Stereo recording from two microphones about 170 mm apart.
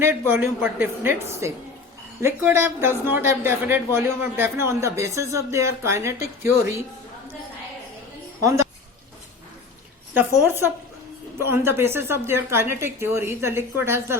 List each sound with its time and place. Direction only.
0.0 s a man's voice: 10° right (ahead or behind)
10.2 s a man's voice: 10° right (ahead or behind)